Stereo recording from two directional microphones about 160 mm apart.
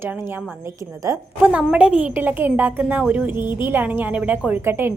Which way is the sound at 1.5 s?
5° right (ahead or behind).